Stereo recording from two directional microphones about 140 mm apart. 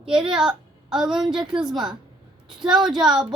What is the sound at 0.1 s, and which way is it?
A woman's voice, 5° right (ahead or behind).